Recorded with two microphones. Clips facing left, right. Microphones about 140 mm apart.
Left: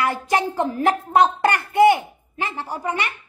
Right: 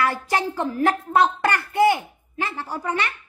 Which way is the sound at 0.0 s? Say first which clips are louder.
Left 2 dB; 15° left (ahead or behind).